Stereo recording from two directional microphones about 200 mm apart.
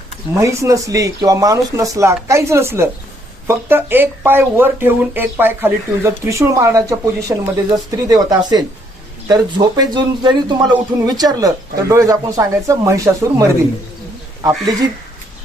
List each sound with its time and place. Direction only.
0.3 s a man's voice: 15° right (ahead or behind)